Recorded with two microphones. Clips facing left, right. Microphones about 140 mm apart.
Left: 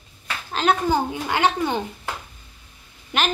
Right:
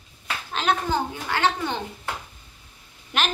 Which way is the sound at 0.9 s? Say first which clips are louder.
Left 4 dB; 15° left (ahead or behind).